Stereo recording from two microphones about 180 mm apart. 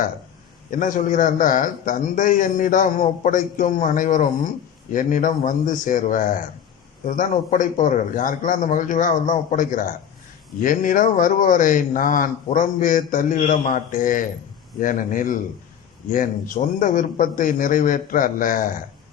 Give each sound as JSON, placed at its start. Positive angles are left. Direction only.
{"t": 0.7, "sound": "a man's voice", "side_deg": 45}